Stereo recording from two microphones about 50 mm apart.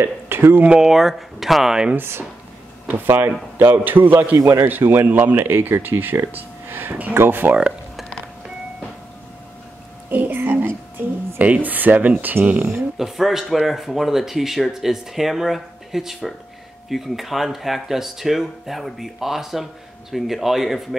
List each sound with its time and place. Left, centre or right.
0.0 s speech: right
0.7 s speech: centre
2.0 s speech: right
4.4 s a man's voice: right
4.6 s speech: right
6.3 s a sound: right
7.2 s speech: right
10.0 s speech: right
12.9 s speech: centre